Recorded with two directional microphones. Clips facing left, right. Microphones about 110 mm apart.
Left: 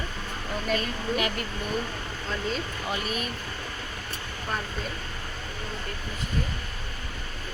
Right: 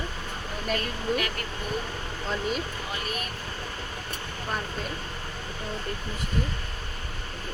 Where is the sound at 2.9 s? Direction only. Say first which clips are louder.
Left 4 dB; 20° left (ahead or behind).